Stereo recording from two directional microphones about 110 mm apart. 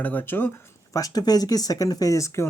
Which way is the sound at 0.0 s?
15° left (ahead or behind).